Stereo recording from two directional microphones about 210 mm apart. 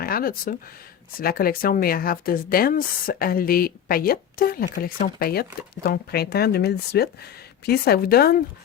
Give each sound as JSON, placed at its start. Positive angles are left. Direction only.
{"t": 0.0, "sound": "speech", "side_deg": 45}